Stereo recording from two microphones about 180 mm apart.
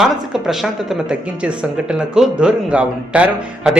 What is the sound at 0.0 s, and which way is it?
Speech, centre (ahead or behind).